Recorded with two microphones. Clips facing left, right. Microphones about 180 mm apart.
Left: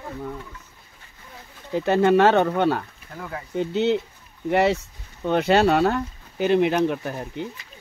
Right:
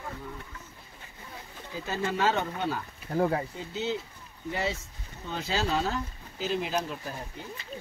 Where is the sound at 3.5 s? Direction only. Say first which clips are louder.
Left 11 dB; 70° left (ahead or behind).